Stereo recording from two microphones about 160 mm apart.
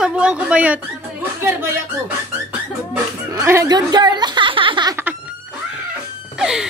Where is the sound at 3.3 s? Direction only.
20° right (ahead or behind).